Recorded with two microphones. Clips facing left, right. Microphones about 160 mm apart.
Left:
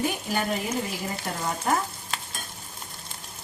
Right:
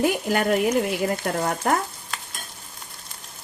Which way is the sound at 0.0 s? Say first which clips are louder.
Right 6 dB; 70° right (ahead or behind).